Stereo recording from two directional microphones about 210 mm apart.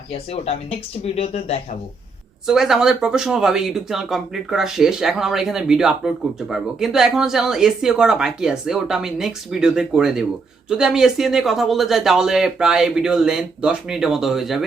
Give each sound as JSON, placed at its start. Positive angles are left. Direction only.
{"t": 0.1, "sound": "speech", "side_deg": 30}
{"t": 2.5, "sound": "speech", "side_deg": 0}